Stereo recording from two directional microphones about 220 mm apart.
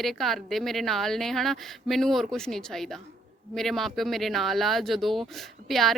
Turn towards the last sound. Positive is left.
turn(degrees=0)  # may be behind; listen again after turning